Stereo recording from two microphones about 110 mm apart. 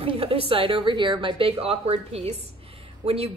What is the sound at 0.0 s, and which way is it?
A woman's voice, 60° right (ahead or behind).